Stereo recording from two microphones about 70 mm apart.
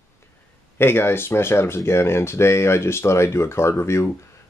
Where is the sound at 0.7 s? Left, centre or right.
Left.